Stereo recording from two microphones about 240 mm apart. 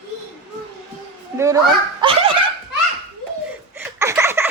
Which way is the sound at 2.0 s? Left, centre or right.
Right.